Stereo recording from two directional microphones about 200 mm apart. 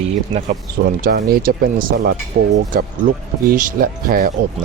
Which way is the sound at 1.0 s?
50° right (ahead or behind).